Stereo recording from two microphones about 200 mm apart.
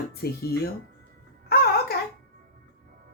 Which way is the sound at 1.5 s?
50° left (ahead or behind).